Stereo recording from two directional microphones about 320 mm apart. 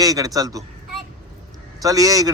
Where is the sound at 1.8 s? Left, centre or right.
Centre.